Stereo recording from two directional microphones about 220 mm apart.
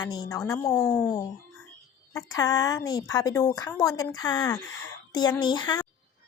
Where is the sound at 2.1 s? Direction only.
15° left (ahead or behind).